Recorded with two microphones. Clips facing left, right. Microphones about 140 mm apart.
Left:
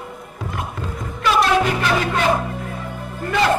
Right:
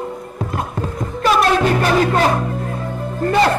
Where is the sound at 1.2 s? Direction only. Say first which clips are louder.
Right 2 dB; 40° right (ahead or behind).